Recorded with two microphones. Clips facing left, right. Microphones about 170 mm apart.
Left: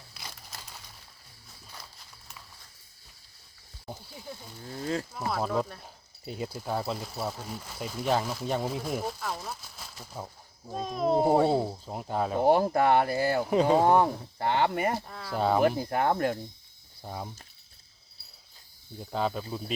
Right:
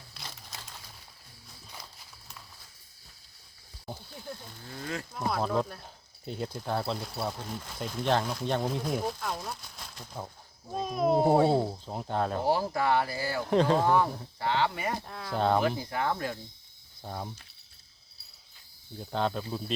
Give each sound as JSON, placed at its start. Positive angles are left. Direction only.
{"t": 0.1, "sound": "crumpling", "side_deg": 5}
{"t": 1.8, "sound": "walk", "side_deg": 0}
{"t": 3.8, "sound": "a sound", "side_deg": 5}
{"t": 4.8, "sound": "a sound", "side_deg": 30}
{"t": 5.1, "sound": "speech", "side_deg": 0}
{"t": 12.5, "sound": "speech", "side_deg": 55}
{"t": 13.4, "sound": "speech", "side_deg": 5}
{"t": 14.3, "sound": "cricket", "side_deg": 50}
{"t": 15.0, "sound": "speech", "side_deg": 0}
{"t": 15.6, "sound": "cricket", "side_deg": 50}
{"t": 17.0, "sound": "speech", "side_deg": 5}
{"t": 18.9, "sound": "speech", "side_deg": 5}